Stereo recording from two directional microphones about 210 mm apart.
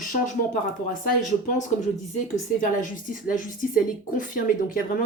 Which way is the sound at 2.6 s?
40° left (ahead or behind).